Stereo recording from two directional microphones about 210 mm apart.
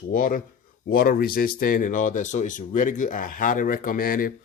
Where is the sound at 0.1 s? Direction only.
40° left (ahead or behind).